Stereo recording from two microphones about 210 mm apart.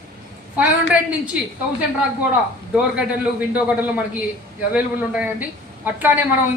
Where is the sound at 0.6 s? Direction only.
5° right (ahead or behind).